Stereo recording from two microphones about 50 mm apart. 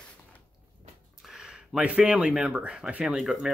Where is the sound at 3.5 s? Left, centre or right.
Centre.